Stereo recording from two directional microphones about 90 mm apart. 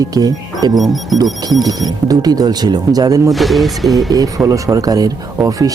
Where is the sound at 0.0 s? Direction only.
45° right (ahead or behind).